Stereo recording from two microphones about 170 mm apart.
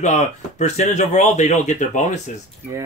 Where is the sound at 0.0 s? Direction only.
45° left (ahead or behind).